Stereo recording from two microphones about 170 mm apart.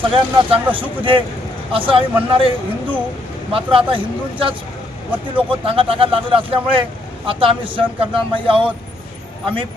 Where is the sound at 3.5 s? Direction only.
30° right (ahead or behind).